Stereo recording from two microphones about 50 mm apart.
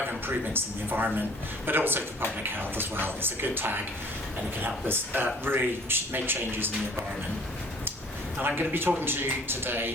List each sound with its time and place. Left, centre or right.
0.3 s speech: right
8.4 s speech: right